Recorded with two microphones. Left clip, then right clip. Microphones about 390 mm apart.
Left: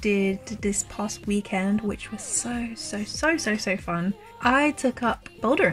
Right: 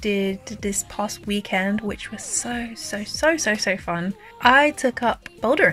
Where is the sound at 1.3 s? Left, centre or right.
Right.